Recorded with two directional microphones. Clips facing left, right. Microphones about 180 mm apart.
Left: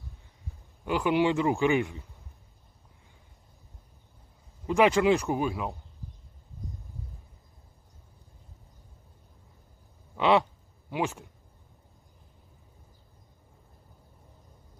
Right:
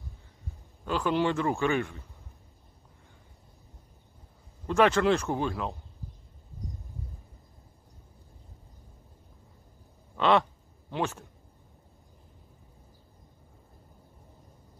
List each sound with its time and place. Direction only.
0.8 s a man's voice: 15° left (ahead or behind)
4.6 s a man's voice: 10° left (ahead or behind)
10.1 s a sound: 15° left (ahead or behind)
10.9 s a man's voice: 15° left (ahead or behind)